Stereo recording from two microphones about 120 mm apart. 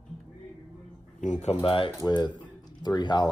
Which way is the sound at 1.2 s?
80° left.